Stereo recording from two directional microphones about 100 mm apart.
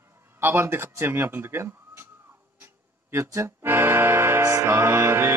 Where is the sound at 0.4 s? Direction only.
25° right (ahead or behind).